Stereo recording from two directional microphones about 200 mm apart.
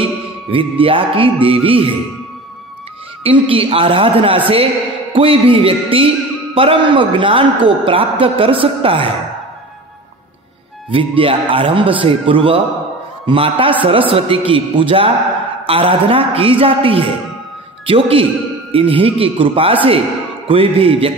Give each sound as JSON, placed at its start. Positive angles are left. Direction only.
{"t": 0.0, "sound": "music", "side_deg": -25}
{"t": 3.3, "sound": "music", "side_deg": -25}
{"t": 10.9, "sound": "music", "side_deg": -25}